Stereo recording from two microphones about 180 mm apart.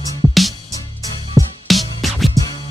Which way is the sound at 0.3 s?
Centre (ahead or behind).